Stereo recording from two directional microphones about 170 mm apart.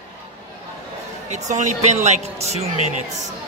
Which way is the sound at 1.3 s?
45° right (ahead or behind).